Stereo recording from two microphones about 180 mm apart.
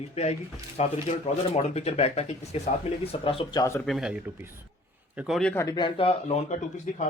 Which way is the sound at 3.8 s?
Centre (ahead or behind).